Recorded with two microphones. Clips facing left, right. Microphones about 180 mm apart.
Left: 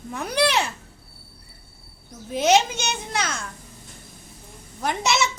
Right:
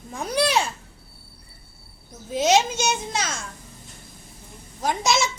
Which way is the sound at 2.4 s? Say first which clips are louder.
Even; 60° left (ahead or behind).